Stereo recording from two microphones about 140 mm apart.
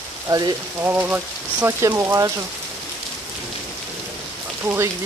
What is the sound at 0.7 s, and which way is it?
Speech, 15° right (ahead or behind).